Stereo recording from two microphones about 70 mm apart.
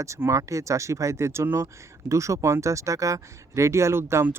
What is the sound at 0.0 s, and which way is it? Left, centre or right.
Speech, right.